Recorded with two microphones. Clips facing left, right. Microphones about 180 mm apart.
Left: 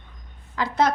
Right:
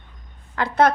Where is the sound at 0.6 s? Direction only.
60° right (ahead or behind).